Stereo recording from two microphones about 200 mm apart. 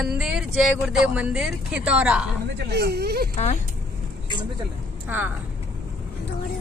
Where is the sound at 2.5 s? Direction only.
55° right (ahead or behind).